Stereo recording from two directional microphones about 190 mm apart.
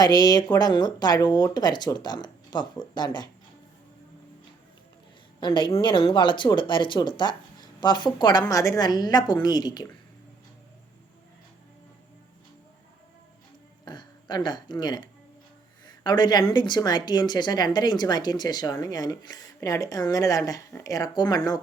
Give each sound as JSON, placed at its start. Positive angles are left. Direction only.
{"t": 0.0, "sound": "speech", "side_deg": 20}
{"t": 5.4, "sound": "speech", "side_deg": 25}
{"t": 13.8, "sound": "speech", "side_deg": 25}